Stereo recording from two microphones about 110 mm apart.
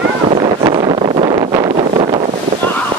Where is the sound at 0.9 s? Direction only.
65° right (ahead or behind).